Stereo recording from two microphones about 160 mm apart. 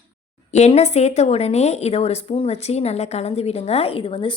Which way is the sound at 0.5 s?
45° left (ahead or behind).